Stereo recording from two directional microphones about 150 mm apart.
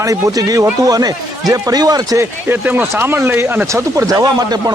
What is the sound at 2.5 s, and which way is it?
Speech, 10° right (ahead or behind).